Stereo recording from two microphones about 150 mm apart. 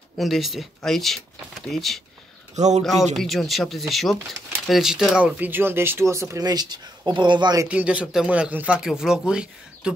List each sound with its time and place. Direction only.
0.2 s speech: centre (ahead or behind)
2.5 s speech: 50° right (ahead or behind)
2.8 s speech: centre (ahead or behind); by 7.6 s 30° right (ahead or behind)
7.6 s speech: 10° right (ahead or behind)